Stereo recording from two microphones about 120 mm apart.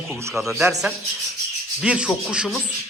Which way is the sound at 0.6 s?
25° right (ahead or behind).